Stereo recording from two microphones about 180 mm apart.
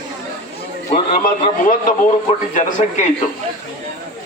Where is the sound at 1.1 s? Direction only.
50° left (ahead or behind).